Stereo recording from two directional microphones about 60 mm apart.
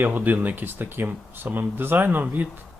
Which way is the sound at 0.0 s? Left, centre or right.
Right.